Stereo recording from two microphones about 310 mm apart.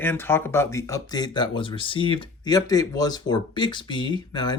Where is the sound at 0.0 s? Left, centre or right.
Centre.